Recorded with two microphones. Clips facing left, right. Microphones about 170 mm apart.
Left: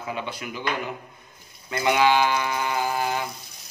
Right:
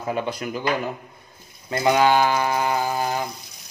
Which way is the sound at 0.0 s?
40° right (ahead or behind).